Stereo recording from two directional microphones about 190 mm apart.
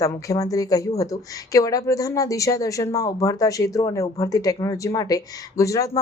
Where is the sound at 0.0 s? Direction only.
15° left (ahead or behind).